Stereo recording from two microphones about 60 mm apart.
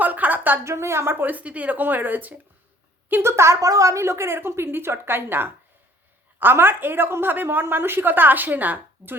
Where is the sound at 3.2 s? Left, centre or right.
Right.